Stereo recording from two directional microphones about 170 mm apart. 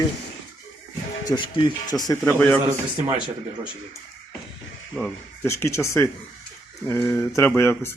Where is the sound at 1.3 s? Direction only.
30° left (ahead or behind); by 2.5 s 15° left (ahead or behind).